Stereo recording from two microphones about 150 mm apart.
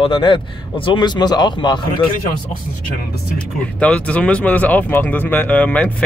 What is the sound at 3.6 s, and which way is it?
Speech, 10° left (ahead or behind).